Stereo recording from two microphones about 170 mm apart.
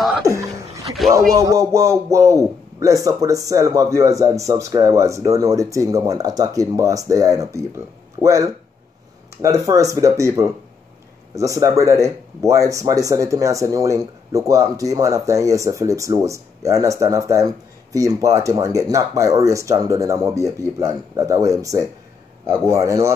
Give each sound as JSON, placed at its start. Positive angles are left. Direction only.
{"t": 0.2, "sound": "chuckle", "side_deg": -20}
{"t": 1.1, "sound": "speech", "side_deg": -20}